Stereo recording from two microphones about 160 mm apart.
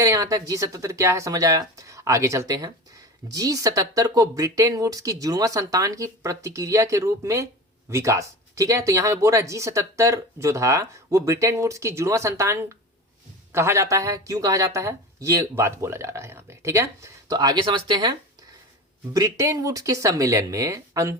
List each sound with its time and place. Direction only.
0.0 s speech: 20° right (ahead or behind)